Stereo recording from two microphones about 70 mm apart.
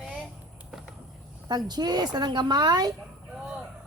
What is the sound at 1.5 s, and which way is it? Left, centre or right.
Speech, right.